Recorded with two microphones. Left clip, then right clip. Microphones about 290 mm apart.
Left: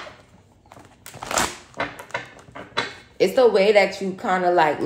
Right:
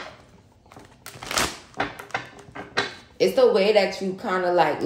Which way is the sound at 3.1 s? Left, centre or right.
Left.